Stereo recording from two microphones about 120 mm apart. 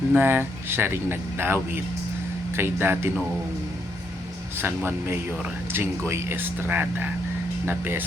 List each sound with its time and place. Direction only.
0.1 s speech: 15° right (ahead or behind)
4.5 s speech: 20° right (ahead or behind)